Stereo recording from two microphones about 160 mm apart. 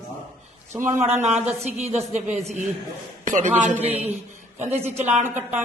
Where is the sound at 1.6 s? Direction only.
45° right (ahead or behind).